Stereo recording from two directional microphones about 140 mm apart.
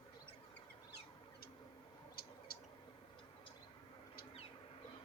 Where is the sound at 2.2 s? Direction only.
90° left.